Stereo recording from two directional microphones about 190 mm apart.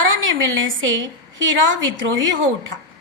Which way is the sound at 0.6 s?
85° right.